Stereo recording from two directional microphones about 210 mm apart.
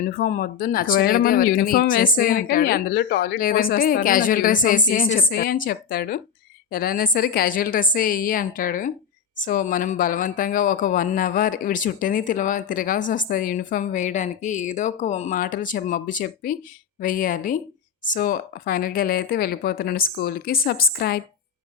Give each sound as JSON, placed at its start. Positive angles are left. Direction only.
{"t": 0.0, "sound": "speech", "side_deg": 40}